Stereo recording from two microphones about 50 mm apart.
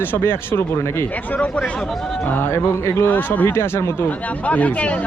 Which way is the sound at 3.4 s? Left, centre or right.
Left.